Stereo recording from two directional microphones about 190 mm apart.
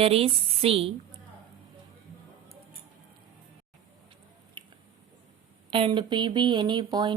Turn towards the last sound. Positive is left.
turn(degrees=-25)  # may be behind; listen again after turning